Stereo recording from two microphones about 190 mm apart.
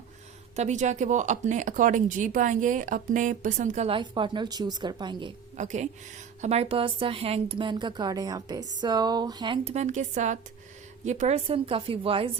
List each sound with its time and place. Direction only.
0.5 s speech: 40° right (ahead or behind)
5.5 s a woman's voice: 40° right (ahead or behind)